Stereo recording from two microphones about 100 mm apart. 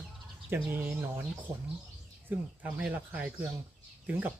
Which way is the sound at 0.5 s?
20° right (ahead or behind).